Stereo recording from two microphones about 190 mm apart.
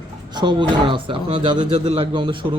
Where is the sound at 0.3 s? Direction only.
25° right (ahead or behind).